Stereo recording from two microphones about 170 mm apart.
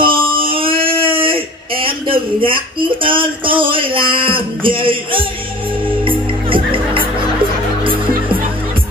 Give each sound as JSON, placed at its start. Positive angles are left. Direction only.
{"t": 0.0, "sound": "a sound", "side_deg": -30}
{"t": 1.0, "sound": "speech", "side_deg": -30}
{"t": 6.0, "sound": "music", "side_deg": -30}